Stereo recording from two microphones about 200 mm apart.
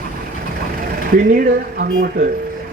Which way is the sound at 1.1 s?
50° right (ahead or behind).